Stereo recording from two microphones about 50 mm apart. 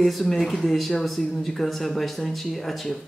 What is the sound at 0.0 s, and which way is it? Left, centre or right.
Speech, centre.